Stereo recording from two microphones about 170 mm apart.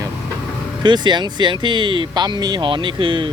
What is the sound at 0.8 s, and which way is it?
Speech, 25° right (ahead or behind).